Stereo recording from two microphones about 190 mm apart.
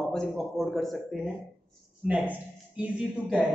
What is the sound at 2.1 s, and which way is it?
Speech, 5° right (ahead or behind).